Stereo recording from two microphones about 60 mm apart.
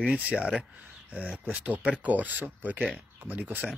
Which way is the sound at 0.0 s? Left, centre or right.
Right.